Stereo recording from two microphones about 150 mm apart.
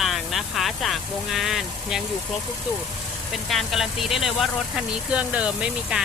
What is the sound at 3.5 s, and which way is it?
Speech, centre (ahead or behind).